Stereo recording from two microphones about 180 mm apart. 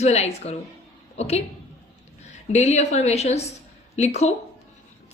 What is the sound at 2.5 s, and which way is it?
A woman's voice, 40° left (ahead or behind).